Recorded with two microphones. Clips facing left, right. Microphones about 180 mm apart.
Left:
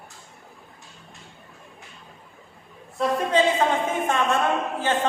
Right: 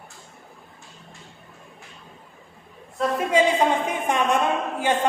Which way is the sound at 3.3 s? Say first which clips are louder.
Right 1 dB; 10° right (ahead or behind).